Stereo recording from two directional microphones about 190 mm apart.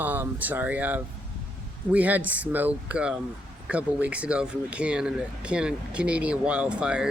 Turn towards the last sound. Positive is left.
turn(degrees=-5)  # may be behind; listen again after turning